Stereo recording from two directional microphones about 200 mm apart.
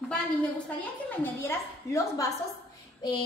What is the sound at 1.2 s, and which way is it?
A woman's voice, 10° left (ahead or behind).